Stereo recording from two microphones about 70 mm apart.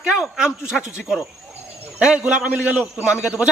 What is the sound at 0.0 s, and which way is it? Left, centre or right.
A man's voice, centre.